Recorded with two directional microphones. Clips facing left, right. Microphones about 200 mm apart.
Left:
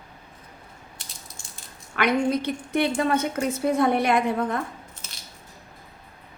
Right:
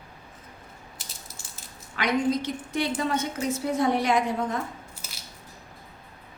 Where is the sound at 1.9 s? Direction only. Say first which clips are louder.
Left 2 dB; 60° left (ahead or behind).